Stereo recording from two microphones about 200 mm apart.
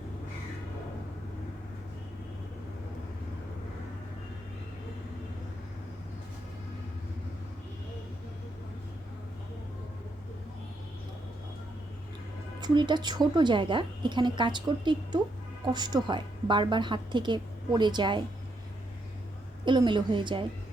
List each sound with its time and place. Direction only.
12.5 s a woman's voice: 20° right (ahead or behind)
19.6 s a woman's voice: 25° right (ahead or behind)